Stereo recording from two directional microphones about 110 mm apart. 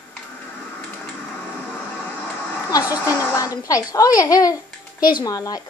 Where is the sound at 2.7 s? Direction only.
30° left (ahead or behind).